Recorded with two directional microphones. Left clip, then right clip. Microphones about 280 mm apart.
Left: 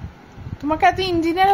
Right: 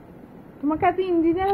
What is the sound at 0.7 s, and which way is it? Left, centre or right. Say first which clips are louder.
Speech: left 4 dB; centre.